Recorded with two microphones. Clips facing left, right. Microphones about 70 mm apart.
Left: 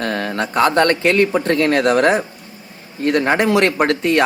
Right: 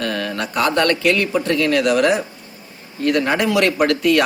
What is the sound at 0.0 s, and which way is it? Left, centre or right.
Speech, left.